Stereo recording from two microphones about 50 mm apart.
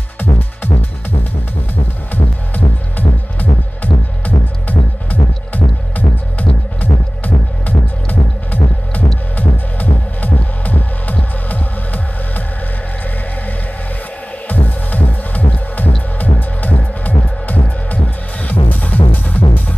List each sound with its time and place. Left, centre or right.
2.1 s music: left
14.5 s music: left